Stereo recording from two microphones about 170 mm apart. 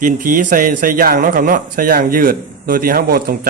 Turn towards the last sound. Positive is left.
turn(degrees=-60)  # may be behind; listen again after turning